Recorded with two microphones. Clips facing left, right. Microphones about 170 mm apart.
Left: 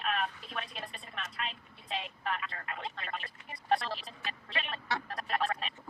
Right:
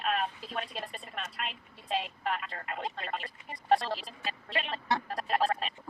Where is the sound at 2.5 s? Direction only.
40° right (ahead or behind).